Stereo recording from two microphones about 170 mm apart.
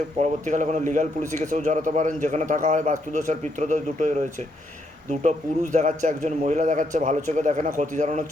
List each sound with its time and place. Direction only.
0.2 s a man's voice: 45° right (ahead or behind)
5.7 s a man's voice: 45° right (ahead or behind)